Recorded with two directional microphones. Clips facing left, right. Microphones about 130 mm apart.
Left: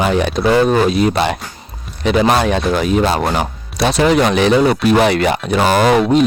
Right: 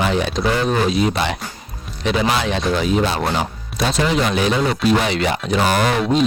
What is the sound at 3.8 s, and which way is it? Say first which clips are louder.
Speech: left 6 dB; 70° left (ahead or behind).